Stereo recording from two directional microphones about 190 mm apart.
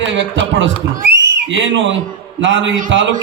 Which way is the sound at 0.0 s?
70° right (ahead or behind).